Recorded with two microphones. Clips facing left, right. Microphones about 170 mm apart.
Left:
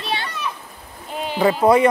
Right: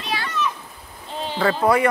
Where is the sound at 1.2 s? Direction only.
15° left (ahead or behind).